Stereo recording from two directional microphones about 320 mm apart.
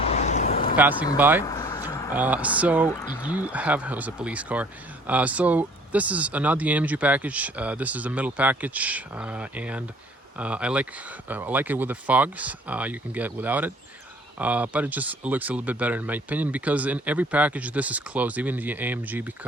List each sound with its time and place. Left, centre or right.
0.1 s vehicle: left
1.1 s speech: centre
1.5 s a sound: centre
2.1 s speech: centre